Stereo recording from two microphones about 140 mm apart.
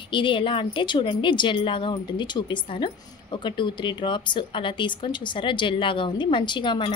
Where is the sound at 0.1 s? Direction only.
35° left (ahead or behind).